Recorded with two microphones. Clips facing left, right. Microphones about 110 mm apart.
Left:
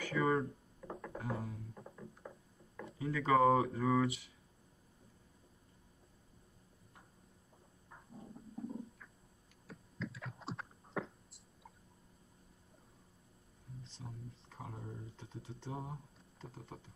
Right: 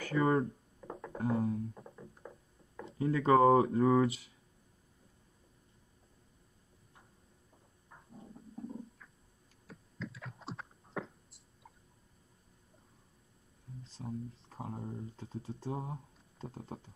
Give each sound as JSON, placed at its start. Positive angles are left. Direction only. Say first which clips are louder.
{"t": 0.0, "sound": "speech", "louder": "right 4 dB", "side_deg": -30}
{"t": 2.8, "sound": "speech", "louder": "right 6 dB", "side_deg": -35}
{"t": 7.9, "sound": "stomach rumble", "louder": "even", "side_deg": 0}
{"t": 9.7, "sound": "computer keyboard", "louder": "even", "side_deg": 0}
{"t": 13.8, "sound": "speech", "louder": "right 12 dB", "side_deg": 0}
{"t": 14.5, "sound": "speech", "louder": "right 5 dB", "side_deg": -35}